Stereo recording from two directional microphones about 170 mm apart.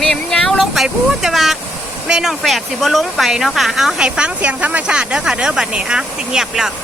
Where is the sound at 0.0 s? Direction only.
5° left (ahead or behind).